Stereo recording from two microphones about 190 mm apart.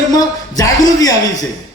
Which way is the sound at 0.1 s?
20° left (ahead or behind).